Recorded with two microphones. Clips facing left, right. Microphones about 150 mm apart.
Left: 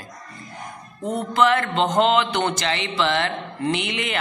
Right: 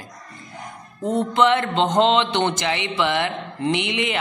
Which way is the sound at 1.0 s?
20° right (ahead or behind).